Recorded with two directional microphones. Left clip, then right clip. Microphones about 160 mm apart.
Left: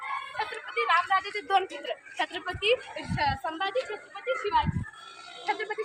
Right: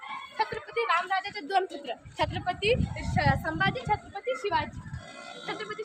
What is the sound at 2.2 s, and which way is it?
A child's voice, 50° right (ahead or behind).